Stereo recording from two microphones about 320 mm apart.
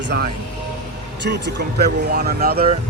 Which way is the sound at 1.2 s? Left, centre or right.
Right.